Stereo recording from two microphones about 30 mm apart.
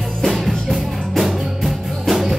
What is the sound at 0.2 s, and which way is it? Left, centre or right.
Music, centre.